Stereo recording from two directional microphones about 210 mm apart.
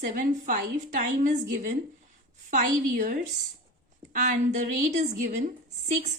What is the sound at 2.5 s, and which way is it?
A woman's voice, 40° right (ahead or behind).